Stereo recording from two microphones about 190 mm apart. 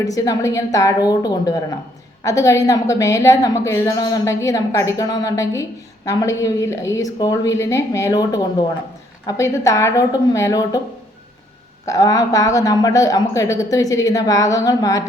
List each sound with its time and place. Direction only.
0.0 s a woman's voice: 20° left (ahead or behind)
11.9 s a woman's voice: 20° left (ahead or behind)